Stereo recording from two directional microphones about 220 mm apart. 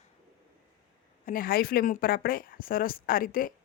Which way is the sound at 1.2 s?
40° left (ahead or behind).